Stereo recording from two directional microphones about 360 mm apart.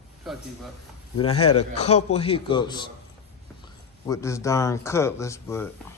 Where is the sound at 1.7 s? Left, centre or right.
Centre.